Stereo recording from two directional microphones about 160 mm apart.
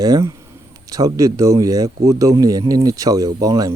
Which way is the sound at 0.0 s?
25° right (ahead or behind).